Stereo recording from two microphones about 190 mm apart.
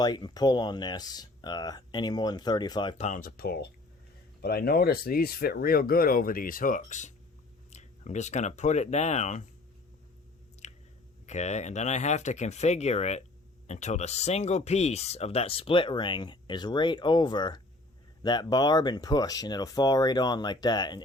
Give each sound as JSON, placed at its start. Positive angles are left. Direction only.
{"t": 0.0, "sound": "speech", "side_deg": 20}
{"t": 3.0, "sound": "speech", "side_deg": 40}
{"t": 10.6, "sound": "chewing", "side_deg": 35}
{"t": 11.3, "sound": "speech", "side_deg": 35}